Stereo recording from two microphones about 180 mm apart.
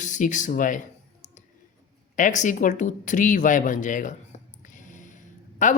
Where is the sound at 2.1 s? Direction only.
45° left (ahead or behind).